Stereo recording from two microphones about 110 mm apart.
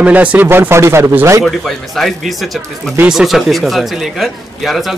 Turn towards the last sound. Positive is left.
turn(degrees=0)  # may be behind; listen again after turning